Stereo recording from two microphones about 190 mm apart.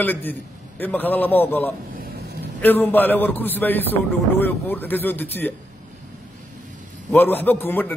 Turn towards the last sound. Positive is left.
turn(degrees=10)  # may be behind; listen again after turning